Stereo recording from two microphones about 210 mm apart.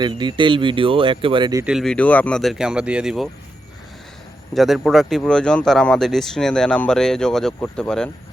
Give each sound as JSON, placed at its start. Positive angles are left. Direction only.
{"t": 0.0, "sound": "speech", "side_deg": -20}
{"t": 1.6, "sound": "speech", "side_deg": 0}
{"t": 4.5, "sound": "speech", "side_deg": 0}